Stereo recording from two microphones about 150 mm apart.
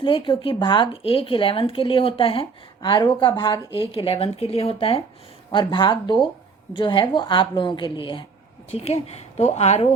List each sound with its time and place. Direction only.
0.0 s speech: 35° left (ahead or behind)